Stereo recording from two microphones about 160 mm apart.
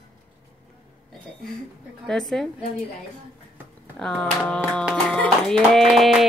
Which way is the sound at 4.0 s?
5° left (ahead or behind).